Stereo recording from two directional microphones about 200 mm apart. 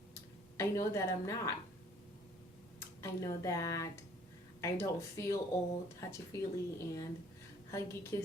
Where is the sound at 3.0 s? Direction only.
15° left (ahead or behind).